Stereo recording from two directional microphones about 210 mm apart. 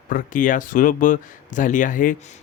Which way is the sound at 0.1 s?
40° left (ahead or behind).